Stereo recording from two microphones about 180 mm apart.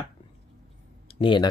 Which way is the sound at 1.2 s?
25° left (ahead or behind).